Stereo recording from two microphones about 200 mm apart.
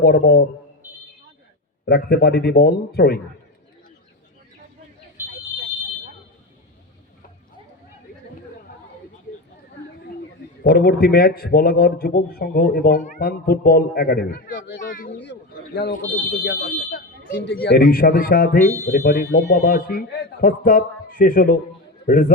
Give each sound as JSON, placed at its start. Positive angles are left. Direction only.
{"t": 0.0, "sound": "a man's voice", "side_deg": 50}
{"t": 1.9, "sound": "a man's voice", "side_deg": 50}
{"t": 10.6, "sound": "a man's voice", "side_deg": 50}
{"t": 14.8, "sound": "a man's voice", "side_deg": 40}
{"t": 15.1, "sound": "a man's voice", "side_deg": 60}